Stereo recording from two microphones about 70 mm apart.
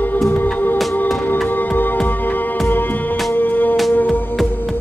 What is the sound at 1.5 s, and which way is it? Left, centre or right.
Music, left.